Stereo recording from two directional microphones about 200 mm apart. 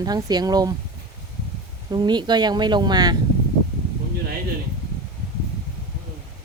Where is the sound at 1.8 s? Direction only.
20° right (ahead or behind).